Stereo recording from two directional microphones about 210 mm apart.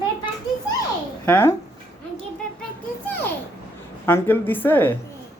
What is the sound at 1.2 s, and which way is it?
Speech, 10° left (ahead or behind).